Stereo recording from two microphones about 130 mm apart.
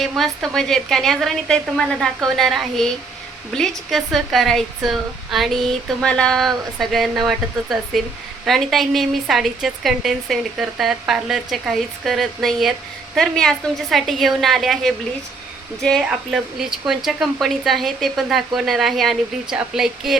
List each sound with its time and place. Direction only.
0.0 s speech: 5° left (ahead or behind)